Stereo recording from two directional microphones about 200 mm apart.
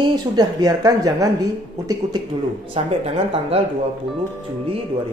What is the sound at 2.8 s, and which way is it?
Speech, 30° right (ahead or behind).